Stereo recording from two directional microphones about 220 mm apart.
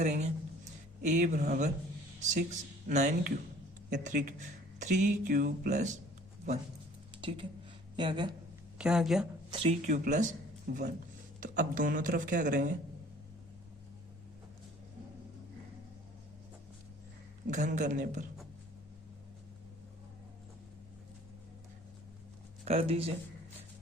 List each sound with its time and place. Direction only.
0.0 s speech: 30° right (ahead or behind)
7.2 s speech: 20° right (ahead or behind)
8.8 s speech: centre (ahead or behind)
9.5 s speech: 30° right (ahead or behind)
11.3 s speech: 40° right (ahead or behind)
17.5 s speech: 35° right (ahead or behind)
22.6 s speech: 25° right (ahead or behind)